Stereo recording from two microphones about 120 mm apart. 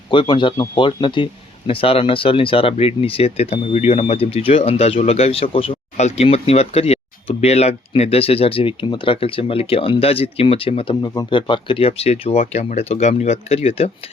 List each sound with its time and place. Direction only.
0.1 s speech: 45° left (ahead or behind)
11.0 s speech: 35° left (ahead or behind); by 13.9 s 55° left (ahead or behind)